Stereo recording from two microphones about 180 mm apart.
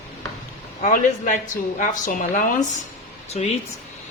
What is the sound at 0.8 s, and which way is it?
A woman's voice, 45° left (ahead or behind).